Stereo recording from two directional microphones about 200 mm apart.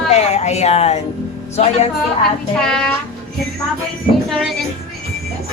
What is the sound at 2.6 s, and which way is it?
Speech, 5° left (ahead or behind).